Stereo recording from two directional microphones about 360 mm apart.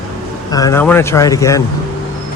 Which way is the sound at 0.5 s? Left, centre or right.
Centre.